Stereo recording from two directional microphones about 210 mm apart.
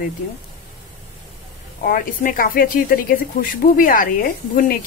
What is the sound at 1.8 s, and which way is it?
Speech, 40° left (ahead or behind).